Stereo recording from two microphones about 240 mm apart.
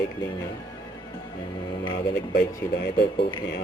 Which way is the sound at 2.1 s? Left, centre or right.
Left.